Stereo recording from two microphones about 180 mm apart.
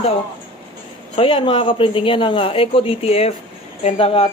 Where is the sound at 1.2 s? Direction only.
30° left (ahead or behind).